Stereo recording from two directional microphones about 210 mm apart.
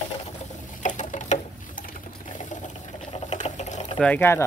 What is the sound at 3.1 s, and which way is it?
Boiling, 30° left (ahead or behind).